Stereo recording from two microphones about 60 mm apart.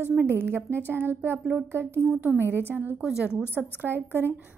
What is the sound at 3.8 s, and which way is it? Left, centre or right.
Speech, right.